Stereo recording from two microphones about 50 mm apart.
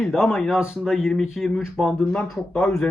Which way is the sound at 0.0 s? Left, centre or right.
Centre.